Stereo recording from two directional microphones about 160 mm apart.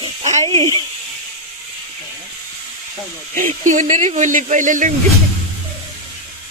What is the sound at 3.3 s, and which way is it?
Speech, 55° right (ahead or behind).